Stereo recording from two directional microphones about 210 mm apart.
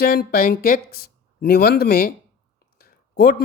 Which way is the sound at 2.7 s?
45° left (ahead or behind).